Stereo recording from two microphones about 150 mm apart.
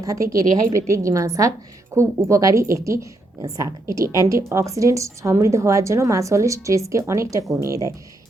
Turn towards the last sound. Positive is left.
turn(degrees=-20)  # may be behind; listen again after turning